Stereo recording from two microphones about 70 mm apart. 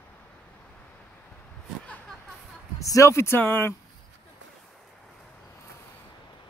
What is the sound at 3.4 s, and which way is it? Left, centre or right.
Speech, left.